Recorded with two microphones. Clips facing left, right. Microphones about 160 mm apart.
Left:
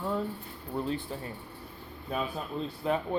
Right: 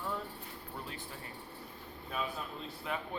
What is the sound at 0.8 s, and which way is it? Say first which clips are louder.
Speech: left 11 dB; 30° left (ahead or behind).